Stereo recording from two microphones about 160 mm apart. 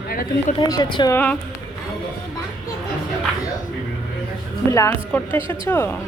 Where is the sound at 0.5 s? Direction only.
25° left (ahead or behind).